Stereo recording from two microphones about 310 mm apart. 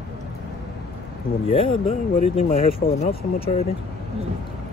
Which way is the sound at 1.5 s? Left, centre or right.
Centre.